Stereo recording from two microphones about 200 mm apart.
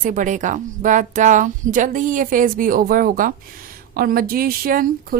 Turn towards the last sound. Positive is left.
turn(degrees=-45)  # may be behind; listen again after turning